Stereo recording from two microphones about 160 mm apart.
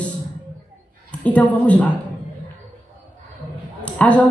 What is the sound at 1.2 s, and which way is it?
Speech, 10° left (ahead or behind).